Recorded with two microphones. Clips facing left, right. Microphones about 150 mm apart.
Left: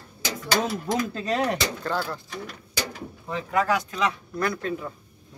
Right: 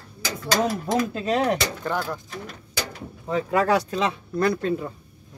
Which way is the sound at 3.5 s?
35° right (ahead or behind).